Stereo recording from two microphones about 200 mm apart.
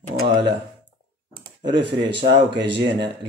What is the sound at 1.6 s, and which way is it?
Speech, 60° right (ahead or behind).